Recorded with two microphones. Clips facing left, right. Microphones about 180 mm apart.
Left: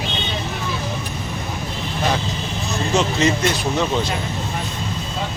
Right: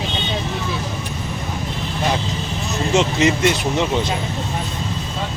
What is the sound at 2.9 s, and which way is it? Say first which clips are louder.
Speech: right 2 dB; 20° right (ahead or behind).